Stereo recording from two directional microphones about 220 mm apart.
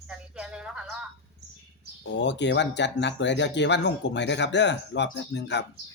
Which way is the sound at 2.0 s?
55° left (ahead or behind).